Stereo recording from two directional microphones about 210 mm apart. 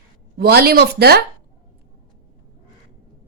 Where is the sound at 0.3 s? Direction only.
45° right (ahead or behind).